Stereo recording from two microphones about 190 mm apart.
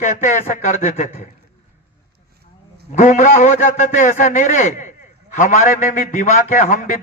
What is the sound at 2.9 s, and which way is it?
A man's voice, 40° left (ahead or behind).